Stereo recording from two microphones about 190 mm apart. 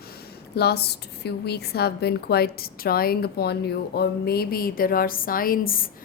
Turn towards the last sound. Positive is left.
turn(degrees=50)  # may be behind; listen again after turning